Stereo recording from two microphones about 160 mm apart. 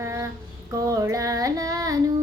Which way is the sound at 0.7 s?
20° right (ahead or behind).